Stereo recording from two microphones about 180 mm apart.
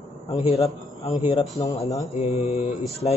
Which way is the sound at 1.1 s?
25° left (ahead or behind).